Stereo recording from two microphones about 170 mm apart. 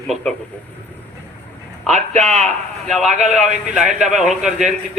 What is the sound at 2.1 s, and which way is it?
Speech, 45° right (ahead or behind).